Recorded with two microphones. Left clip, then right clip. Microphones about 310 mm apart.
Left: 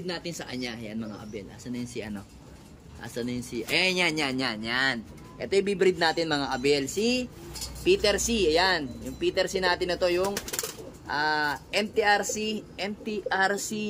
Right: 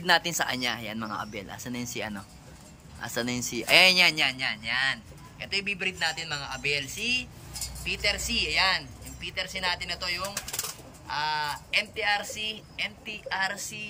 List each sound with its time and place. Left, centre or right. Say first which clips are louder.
0.0 s a man's voice: right 11 dB; centre; by 13.8 s left